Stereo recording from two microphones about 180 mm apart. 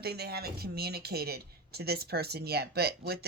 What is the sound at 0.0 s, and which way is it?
Speech, 60° right (ahead or behind).